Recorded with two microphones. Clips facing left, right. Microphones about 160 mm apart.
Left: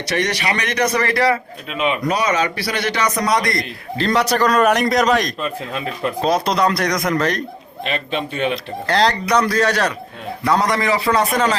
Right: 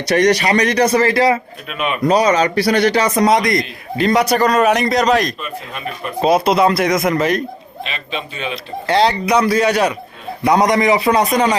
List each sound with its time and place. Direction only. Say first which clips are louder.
0.1 s a man's voice: right 8 dB; 40° right (ahead or behind); by 1.4 s 20° right (ahead or behind)
1.7 s speech: left 1 dB; 25° left (ahead or behind)
2.0 s a man's voice: right 10 dB; 35° right (ahead or behind); by 7.4 s 5° right (ahead or behind)
7.9 s a man's voice: left 5 dB; 55° left (ahead or behind)
8.9 s a man's voice: right 3 dB; 5° right (ahead or behind)